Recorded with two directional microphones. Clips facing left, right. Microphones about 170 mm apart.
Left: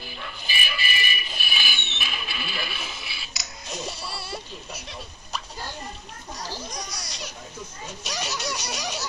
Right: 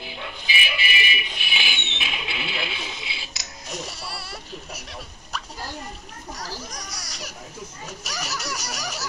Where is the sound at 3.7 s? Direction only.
Centre (ahead or behind).